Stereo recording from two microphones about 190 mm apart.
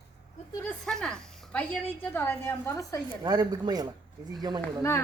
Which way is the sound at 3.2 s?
20° right (ahead or behind).